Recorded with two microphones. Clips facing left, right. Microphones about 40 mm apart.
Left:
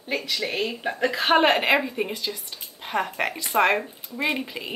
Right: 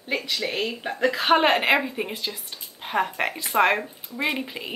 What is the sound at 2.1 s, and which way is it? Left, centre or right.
Speech, centre.